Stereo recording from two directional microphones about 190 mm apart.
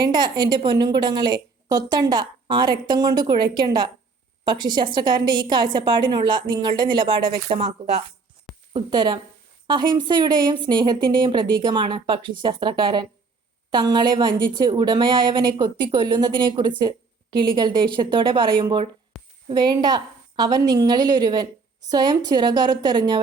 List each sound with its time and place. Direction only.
0.0 s a woman's voice: 25° right (ahead or behind)
19.1 s a sound: centre (ahead or behind)
19.5 s a woman's voice: 20° right (ahead or behind)